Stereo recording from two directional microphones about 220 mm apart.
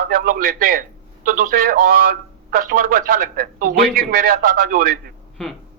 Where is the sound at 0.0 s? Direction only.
45° right (ahead or behind).